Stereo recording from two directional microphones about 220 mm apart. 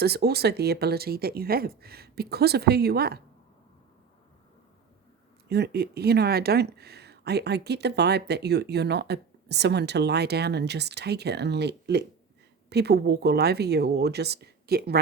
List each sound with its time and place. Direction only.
0.0 s speech: 45° right (ahead or behind)
5.5 s speech: 45° right (ahead or behind)